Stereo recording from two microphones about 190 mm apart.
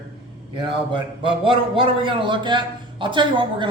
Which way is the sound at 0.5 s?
25° right (ahead or behind).